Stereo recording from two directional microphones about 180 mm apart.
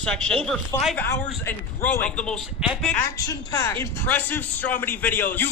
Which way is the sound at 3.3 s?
15° left (ahead or behind).